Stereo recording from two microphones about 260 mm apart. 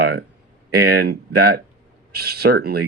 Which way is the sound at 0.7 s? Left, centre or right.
Right.